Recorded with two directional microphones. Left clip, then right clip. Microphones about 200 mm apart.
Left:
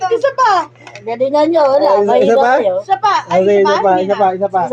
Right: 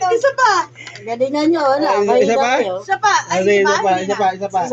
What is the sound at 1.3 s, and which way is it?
Speech, 20° right (ahead or behind).